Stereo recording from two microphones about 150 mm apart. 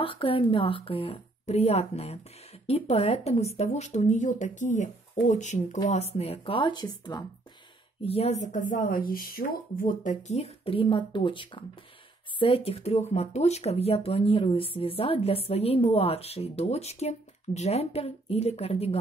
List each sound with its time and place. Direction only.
0.0 s a woman's voice: 35° left (ahead or behind)
8.0 s speech: 40° left (ahead or behind)